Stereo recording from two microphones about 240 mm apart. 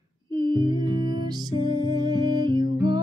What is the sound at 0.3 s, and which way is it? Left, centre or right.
Music, centre.